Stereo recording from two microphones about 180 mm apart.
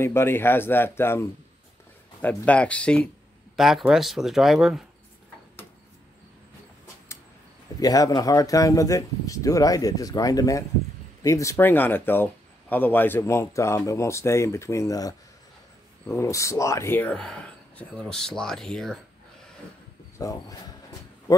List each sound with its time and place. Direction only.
0.0 s speech: 15° left (ahead or behind)
2.2 s speech: 5° left (ahead or behind)
7.8 s speech: 20° left (ahead or behind); by 18.9 s centre (ahead or behind)
20.2 s speech: 20° left (ahead or behind)